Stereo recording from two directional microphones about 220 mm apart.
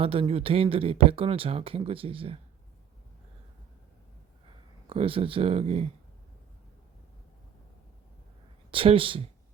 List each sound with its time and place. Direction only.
0.0 s speech: 25° right (ahead or behind)
4.9 s speech: 25° right (ahead or behind)
8.7 s speech: 25° right (ahead or behind)